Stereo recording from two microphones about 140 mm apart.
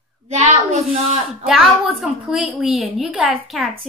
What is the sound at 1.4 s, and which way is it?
A woman's voice, 5° right (ahead or behind).